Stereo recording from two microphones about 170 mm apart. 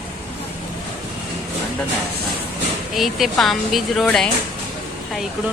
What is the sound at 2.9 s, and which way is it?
A woman's voice, centre (ahead or behind).